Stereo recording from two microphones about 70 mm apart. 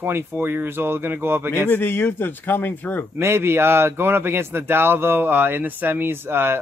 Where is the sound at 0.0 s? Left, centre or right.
Right.